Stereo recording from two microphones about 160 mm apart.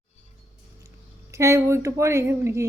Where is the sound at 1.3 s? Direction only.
20° right (ahead or behind).